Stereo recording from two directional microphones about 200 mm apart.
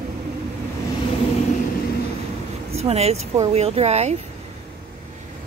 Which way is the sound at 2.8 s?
30° right (ahead or behind).